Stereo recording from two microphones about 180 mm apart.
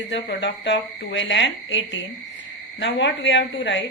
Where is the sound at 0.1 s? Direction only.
85° left.